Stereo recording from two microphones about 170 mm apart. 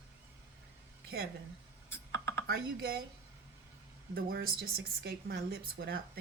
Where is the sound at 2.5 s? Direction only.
65° right (ahead or behind).